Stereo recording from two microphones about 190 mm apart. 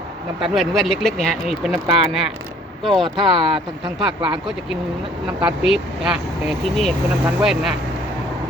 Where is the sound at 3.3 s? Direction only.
25° right (ahead or behind).